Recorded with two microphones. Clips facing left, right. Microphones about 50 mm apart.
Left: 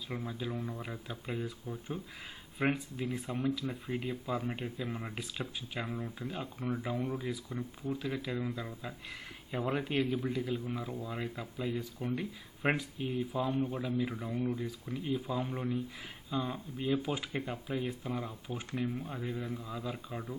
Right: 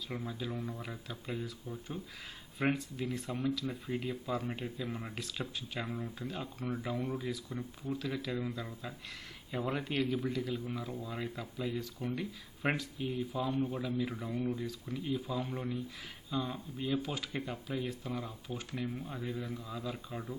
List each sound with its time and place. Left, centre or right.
0.3 s speech: centre
2.6 s speech: centre
14.5 s speech: centre